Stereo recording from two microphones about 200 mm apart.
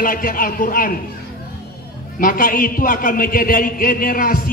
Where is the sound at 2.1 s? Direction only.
45° left (ahead or behind).